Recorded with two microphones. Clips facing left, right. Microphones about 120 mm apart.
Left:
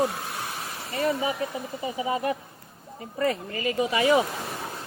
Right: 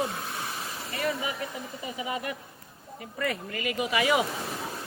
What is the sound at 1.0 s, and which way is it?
Speech, 25° left (ahead or behind).